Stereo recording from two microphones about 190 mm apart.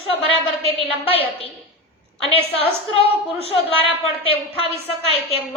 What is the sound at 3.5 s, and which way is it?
A woman's voice, 30° left (ahead or behind).